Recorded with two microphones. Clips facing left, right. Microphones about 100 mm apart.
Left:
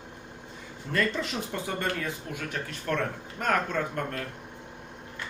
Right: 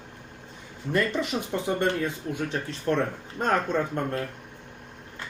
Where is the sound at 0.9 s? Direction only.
15° right (ahead or behind).